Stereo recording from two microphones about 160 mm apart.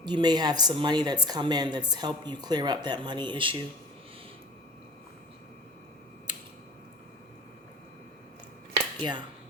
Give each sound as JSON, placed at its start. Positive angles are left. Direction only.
{"t": 0.0, "sound": "speech", "side_deg": -25}
{"t": 6.3, "sound": "a sound", "side_deg": -30}
{"t": 9.0, "sound": "speech", "side_deg": -30}